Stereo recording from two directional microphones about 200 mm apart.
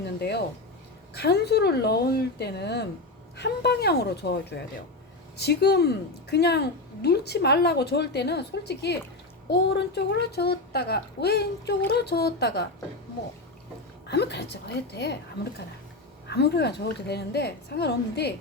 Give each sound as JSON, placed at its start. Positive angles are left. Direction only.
{"t": 0.2, "sound": "a woman's voice", "side_deg": 55}
{"t": 14.1, "sound": "a woman's voice", "side_deg": 55}